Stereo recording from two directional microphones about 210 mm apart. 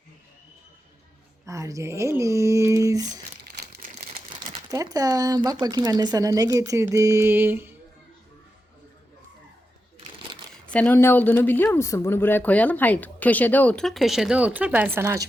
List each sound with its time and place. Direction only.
1.5 s speech: 15° right (ahead or behind)
3.5 s crumpling: 45° right (ahead or behind); by 4.6 s 25° right (ahead or behind)
4.7 s speech: 15° right (ahead or behind)
10.7 s speech: 5° left (ahead or behind); by 15.2 s 10° right (ahead or behind)